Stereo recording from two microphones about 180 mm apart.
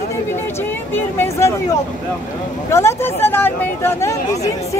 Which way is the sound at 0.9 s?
15° left (ahead or behind).